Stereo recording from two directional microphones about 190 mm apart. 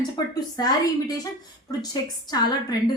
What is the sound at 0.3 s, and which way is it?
A woman's voice, 20° left (ahead or behind).